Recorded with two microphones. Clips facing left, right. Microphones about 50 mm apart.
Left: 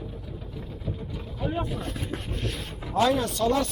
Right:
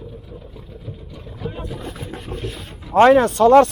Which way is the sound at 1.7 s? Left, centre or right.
Centre.